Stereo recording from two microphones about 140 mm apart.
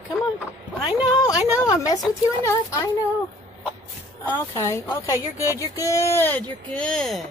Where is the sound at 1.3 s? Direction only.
10° right (ahead or behind).